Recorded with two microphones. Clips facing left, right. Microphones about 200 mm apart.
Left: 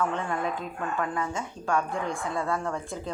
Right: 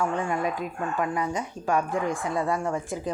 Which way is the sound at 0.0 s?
10° right (ahead or behind).